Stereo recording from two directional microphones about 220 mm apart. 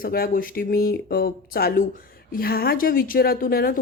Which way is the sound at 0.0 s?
40° left (ahead or behind).